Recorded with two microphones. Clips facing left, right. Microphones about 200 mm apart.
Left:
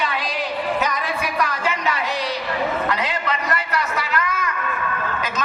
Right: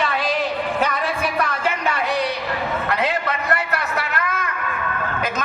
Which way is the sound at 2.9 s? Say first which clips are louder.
Right 2 dB; 55° right (ahead or behind).